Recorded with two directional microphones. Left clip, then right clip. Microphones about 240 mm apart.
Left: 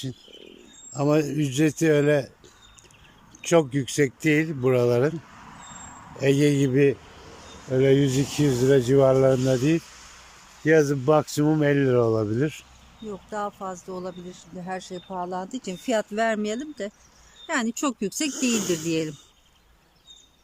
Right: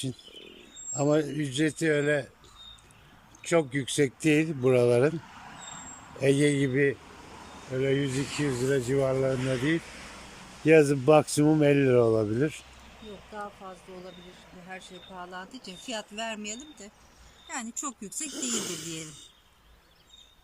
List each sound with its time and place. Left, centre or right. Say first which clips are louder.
0.9 s speech: left 3 dB; centre
3.4 s speech: left 5 dB; centre
6.1 s speech: left 3 dB; centre
10.7 s speech: even; centre
13.3 s speech: left 10 dB; centre; by 18.3 s left
18.3 s speech: left 6 dB; centre